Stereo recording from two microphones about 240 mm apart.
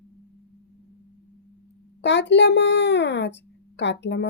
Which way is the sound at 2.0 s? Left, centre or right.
Left.